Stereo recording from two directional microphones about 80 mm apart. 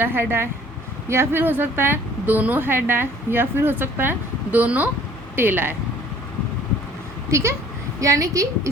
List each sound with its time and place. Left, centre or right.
0.0 s a woman's voice: right
7.3 s a woman's voice: right